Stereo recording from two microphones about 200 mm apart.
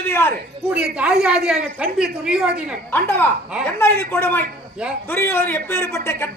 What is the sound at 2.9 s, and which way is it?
Speech, 10° left (ahead or behind).